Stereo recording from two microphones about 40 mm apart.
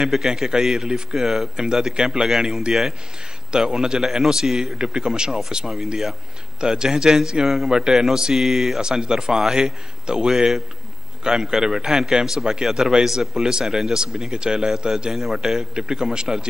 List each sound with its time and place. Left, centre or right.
0.0 s a man's voice: centre
7.7 s a man's voice: centre